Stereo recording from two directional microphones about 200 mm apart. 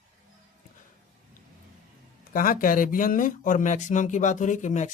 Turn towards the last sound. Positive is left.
turn(degrees=35)  # may be behind; listen again after turning